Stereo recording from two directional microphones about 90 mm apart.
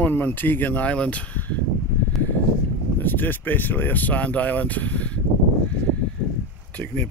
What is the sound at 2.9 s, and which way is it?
Speech, 20° left (ahead or behind).